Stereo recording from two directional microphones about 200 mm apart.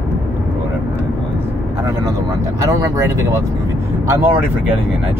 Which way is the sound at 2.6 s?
15° right (ahead or behind).